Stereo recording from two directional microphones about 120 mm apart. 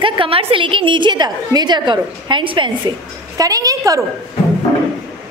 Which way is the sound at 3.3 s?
30° right (ahead or behind).